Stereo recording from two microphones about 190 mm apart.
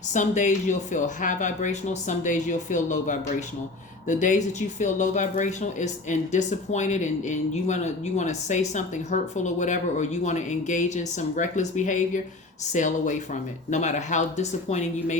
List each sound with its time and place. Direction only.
0.1 s speech: 40° left (ahead or behind)